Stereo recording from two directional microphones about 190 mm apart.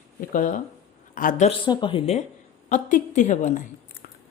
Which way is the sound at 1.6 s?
25° left (ahead or behind).